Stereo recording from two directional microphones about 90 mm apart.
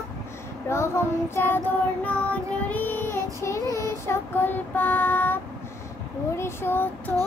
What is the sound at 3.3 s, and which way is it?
Child singing, 35° left (ahead or behind).